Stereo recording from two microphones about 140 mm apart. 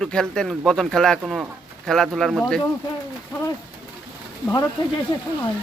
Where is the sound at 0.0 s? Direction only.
5° left (ahead or behind).